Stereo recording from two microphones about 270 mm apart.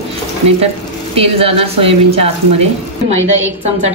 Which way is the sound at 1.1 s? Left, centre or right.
Right.